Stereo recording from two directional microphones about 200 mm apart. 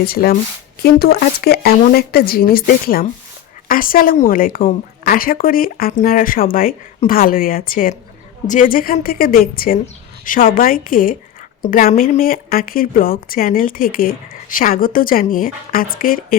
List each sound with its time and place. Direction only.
0.0 s a woman's voice: 50° left (ahead or behind)